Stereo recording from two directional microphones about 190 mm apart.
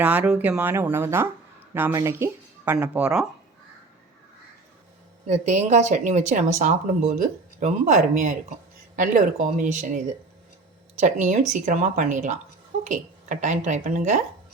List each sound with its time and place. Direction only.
0.0 s speech: 10° right (ahead or behind)
5.2 s a woman's voice: 35° right (ahead or behind)